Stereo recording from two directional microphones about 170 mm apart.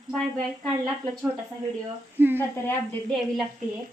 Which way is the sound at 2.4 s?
15° left (ahead or behind).